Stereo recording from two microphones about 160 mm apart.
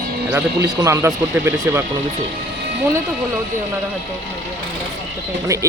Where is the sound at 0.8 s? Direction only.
20° right (ahead or behind).